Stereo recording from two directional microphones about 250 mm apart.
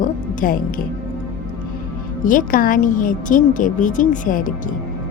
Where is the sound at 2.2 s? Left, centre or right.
Left.